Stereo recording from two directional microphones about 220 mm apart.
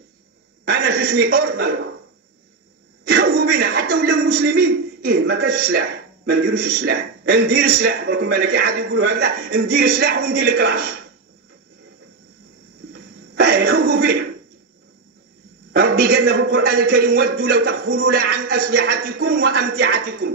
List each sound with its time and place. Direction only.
0.7 s a man's voice: 45° right (ahead or behind)
3.1 s a man's voice: 45° right (ahead or behind)
12.9 s a sound: 45° right (ahead or behind)
15.7 s a man's voice: 45° right (ahead or behind)